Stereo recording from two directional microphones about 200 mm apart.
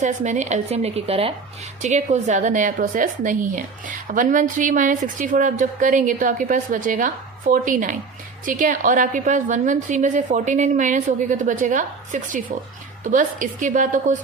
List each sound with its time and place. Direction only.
0.0 s a woman's voice: 35° right (ahead or behind)